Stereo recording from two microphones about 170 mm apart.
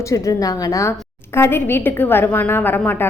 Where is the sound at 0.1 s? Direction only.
20° left (ahead or behind).